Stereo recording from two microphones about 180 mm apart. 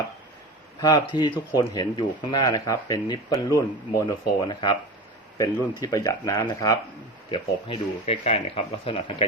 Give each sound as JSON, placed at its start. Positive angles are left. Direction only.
{"t": 0.8, "sound": "speech", "side_deg": 25}